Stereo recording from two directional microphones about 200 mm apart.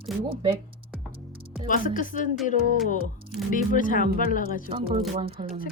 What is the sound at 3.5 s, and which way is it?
A woman's voice, 40° left (ahead or behind).